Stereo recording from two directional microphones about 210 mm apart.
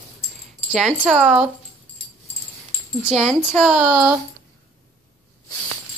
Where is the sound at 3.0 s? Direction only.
5° right (ahead or behind).